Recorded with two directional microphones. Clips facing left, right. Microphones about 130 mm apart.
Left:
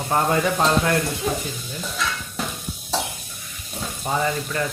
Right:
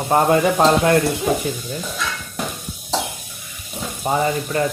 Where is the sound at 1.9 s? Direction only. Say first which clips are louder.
Right 1 dB; centre (ahead or behind).